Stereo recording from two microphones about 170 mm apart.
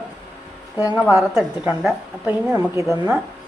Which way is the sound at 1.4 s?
5° right (ahead or behind).